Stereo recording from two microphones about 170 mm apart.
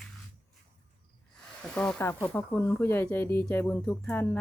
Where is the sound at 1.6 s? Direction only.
5° left (ahead or behind).